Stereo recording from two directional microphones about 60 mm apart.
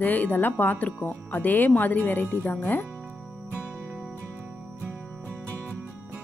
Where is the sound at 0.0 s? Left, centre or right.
Left.